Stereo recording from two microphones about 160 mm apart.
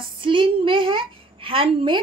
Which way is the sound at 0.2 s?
30° right (ahead or behind).